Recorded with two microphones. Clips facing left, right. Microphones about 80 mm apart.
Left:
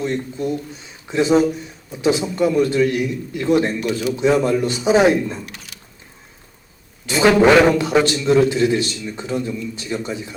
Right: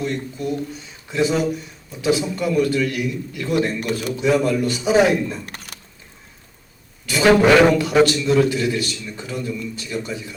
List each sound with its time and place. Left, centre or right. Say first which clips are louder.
0.0 s a man's voice: left 2 dB; left
3.8 s speech: left 3 dB; right
4.2 s a man's voice: left 2 dB; left
5.5 s a sound: right 2 dB; right
7.0 s a man's voice: left 1 dB; left